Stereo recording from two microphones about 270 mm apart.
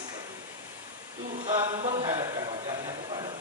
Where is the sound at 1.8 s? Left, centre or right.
Centre.